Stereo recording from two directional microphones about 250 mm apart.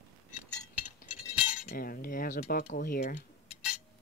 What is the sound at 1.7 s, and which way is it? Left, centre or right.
Speech, left.